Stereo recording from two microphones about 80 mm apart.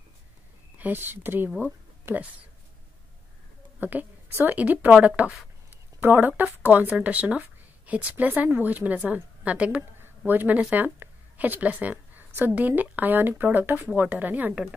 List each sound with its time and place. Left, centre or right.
0.7 s speech: right
3.8 s a woman's voice: right